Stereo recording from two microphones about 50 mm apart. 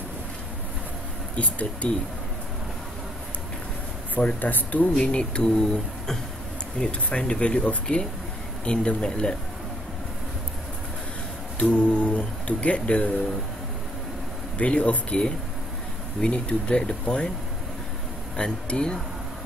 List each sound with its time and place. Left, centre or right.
1.3 s speech: left
4.1 s speech: left
4.9 s speech: left
11.5 s speech: left
14.6 s speech: left
18.3 s speech: centre